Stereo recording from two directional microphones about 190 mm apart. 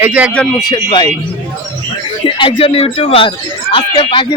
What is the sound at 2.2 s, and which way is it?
Speech, 30° left (ahead or behind).